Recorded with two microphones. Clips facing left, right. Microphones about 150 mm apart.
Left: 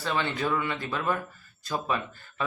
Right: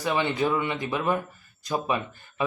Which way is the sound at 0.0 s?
15° right (ahead or behind).